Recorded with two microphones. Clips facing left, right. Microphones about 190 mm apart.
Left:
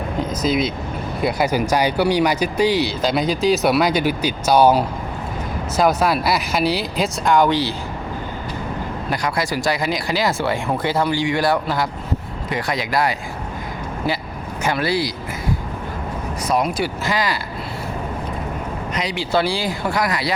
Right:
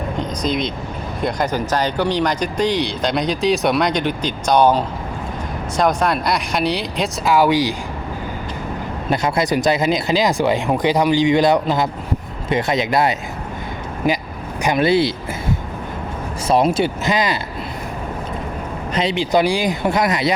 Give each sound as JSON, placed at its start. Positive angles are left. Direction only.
{"t": 0.2, "sound": "vehicle", "side_deg": 5}
{"t": 1.2, "sound": "speech", "side_deg": 10}
{"t": 9.0, "sound": "speech", "side_deg": -25}
{"t": 14.6, "sound": "speech", "side_deg": -20}
{"t": 16.5, "sound": "speech", "side_deg": -25}
{"t": 18.9, "sound": "speech", "side_deg": -20}